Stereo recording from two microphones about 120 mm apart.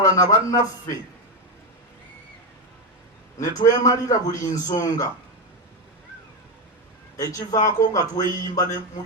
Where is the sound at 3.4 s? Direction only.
30° left (ahead or behind).